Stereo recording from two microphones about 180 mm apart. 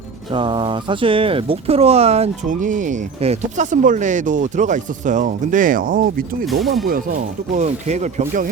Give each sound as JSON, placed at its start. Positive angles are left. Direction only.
{"t": 0.3, "sound": "speech", "side_deg": -25}
{"t": 6.4, "sound": "speech", "side_deg": 0}
{"t": 6.8, "sound": "speech", "side_deg": -50}